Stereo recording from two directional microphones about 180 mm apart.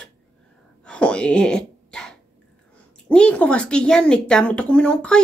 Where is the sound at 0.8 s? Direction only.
5° left (ahead or behind).